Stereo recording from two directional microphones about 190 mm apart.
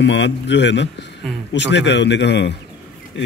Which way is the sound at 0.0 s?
70° left (ahead or behind).